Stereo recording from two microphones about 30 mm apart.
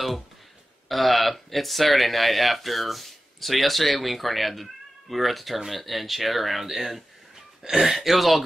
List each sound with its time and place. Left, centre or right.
0.8 s speech: centre
7.6 s speech: right
7.9 s speech: centre